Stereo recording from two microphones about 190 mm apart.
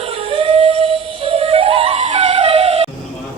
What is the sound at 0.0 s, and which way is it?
Music, 30° right (ahead or behind).